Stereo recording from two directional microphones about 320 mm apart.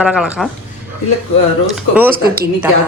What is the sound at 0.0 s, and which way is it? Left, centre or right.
Speech, centre.